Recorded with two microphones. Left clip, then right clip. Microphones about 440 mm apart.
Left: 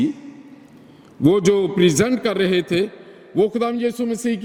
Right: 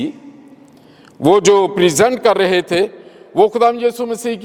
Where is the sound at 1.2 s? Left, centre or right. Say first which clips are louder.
Right 6 dB; right.